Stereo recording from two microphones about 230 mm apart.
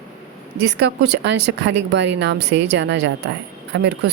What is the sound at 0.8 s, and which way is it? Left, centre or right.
A woman's voice, right.